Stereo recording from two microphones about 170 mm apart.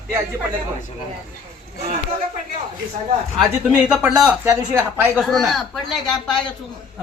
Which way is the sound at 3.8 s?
5° right (ahead or behind).